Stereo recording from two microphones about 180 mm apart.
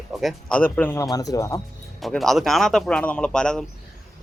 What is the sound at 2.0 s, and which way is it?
Speech, centre (ahead or behind).